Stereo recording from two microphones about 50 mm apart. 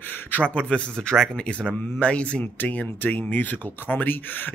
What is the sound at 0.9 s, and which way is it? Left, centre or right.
Speech, centre.